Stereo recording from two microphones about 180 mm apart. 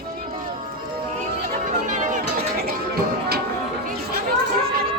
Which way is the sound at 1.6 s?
45° right (ahead or behind).